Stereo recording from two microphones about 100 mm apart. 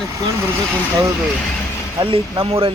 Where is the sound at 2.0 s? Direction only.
60° right (ahead or behind).